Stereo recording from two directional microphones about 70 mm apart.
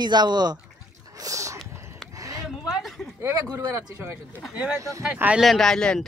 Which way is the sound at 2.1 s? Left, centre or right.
Right.